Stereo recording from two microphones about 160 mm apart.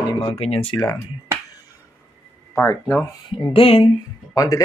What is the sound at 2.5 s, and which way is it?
Speech, 15° left (ahead or behind).